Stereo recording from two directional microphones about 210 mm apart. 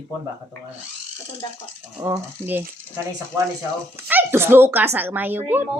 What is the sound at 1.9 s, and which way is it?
Speech, 15° right (ahead or behind).